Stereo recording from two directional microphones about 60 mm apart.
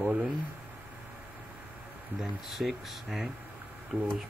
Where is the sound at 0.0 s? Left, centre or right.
Centre.